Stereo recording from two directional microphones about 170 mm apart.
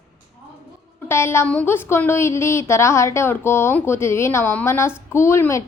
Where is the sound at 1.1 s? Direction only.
15° left (ahead or behind).